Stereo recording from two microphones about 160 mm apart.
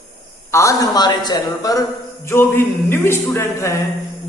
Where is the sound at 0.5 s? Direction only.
20° left (ahead or behind).